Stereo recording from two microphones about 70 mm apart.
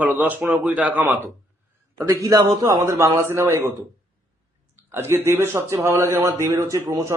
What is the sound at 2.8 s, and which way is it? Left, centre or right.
Speech, right.